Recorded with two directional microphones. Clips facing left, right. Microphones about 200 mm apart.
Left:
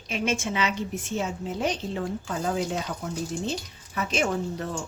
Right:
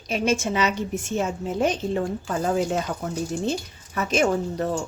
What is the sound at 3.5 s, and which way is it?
A woman's voice, 45° right (ahead or behind).